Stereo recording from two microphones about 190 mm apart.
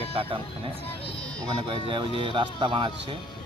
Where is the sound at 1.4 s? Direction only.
25° right (ahead or behind).